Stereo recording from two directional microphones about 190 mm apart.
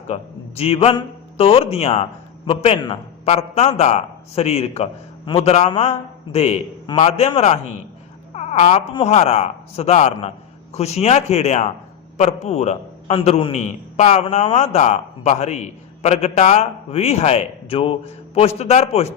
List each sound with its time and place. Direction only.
0.1 s a man's voice: 30° left (ahead or behind)